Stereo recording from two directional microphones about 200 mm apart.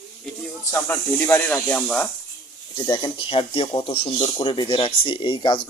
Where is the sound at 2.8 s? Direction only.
20° left (ahead or behind).